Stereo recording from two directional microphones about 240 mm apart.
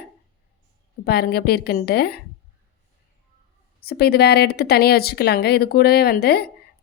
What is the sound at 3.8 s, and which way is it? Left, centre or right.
A woman's voice, left.